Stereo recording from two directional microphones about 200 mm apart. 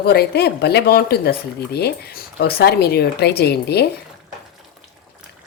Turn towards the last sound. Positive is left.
turn(degrees=55)  # may be behind; listen again after turning